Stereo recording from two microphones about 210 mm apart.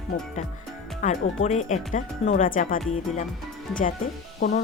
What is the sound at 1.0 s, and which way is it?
Speech, 35° left (ahead or behind).